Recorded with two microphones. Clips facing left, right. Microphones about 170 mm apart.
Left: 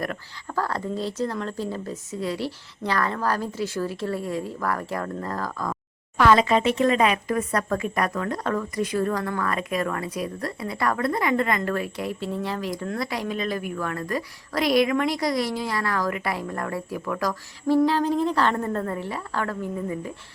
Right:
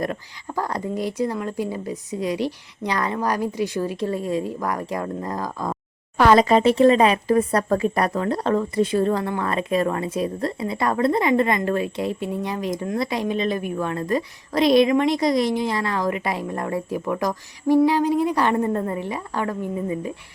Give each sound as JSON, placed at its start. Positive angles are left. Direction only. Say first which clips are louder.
{"t": 0.0, "sound": "speech", "louder": "right 4 dB", "side_deg": -20}
{"t": 6.1, "sound": "speech", "louder": "right 3 dB", "side_deg": -35}